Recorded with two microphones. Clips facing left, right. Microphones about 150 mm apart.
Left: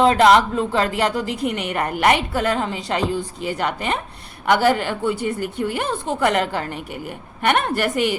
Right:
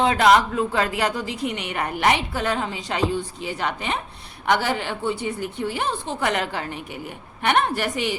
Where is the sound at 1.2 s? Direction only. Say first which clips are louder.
Left 4 dB; centre (ahead or behind).